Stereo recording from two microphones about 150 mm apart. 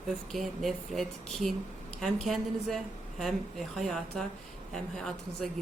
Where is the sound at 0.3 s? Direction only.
Centre (ahead or behind).